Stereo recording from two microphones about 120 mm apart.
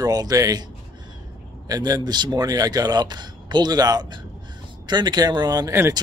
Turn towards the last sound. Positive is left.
turn(degrees=-35)  # may be behind; listen again after turning